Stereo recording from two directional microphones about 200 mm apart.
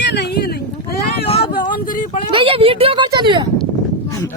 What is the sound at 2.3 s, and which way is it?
Speech, 25° right (ahead or behind).